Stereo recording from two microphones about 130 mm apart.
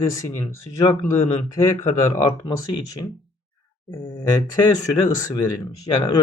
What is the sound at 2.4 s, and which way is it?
Speech, 30° left (ahead or behind).